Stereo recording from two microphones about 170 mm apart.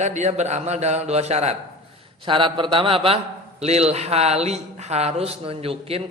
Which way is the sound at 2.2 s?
30° right (ahead or behind).